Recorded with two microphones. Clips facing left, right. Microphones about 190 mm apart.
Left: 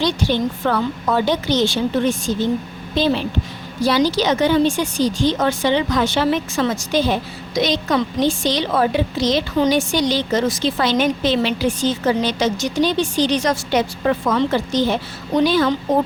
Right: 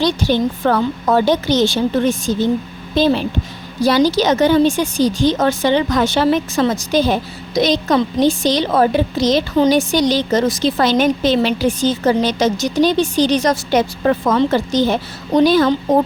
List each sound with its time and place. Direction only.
0.0 s a woman's voice: 40° right (ahead or behind)